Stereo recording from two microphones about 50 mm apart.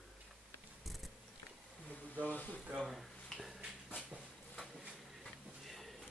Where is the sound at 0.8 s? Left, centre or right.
Centre.